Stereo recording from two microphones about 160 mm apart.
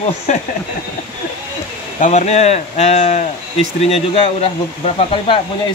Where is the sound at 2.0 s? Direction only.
45° left (ahead or behind).